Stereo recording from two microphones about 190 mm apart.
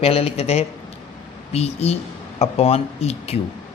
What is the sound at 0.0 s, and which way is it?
Speech, 30° left (ahead or behind).